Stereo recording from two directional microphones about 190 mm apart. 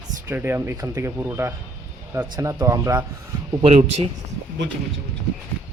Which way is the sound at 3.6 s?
30° right (ahead or behind).